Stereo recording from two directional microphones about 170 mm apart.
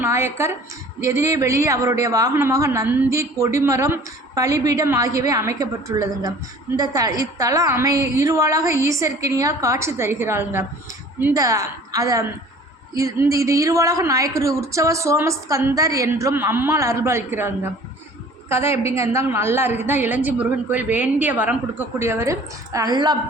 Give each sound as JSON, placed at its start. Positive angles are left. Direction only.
{"t": 0.0, "sound": "a woman's voice", "side_deg": -15}